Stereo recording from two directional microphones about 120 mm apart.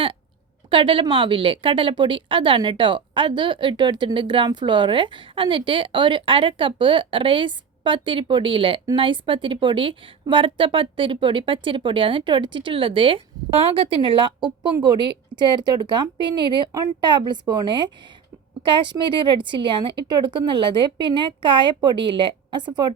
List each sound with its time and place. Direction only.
0.7 s a woman's voice: 45° right (ahead or behind)